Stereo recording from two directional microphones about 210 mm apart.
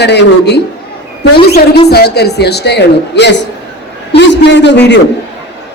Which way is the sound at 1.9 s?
50° left (ahead or behind).